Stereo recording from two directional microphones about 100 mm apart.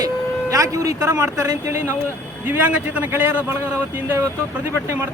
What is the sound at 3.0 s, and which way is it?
Speech, 20° right (ahead or behind).